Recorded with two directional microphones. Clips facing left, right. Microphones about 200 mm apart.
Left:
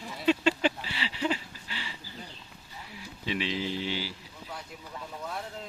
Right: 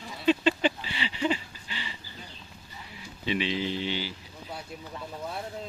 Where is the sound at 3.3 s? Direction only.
Centre (ahead or behind).